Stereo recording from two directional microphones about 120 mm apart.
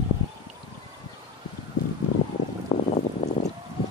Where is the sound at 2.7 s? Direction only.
45° left (ahead or behind).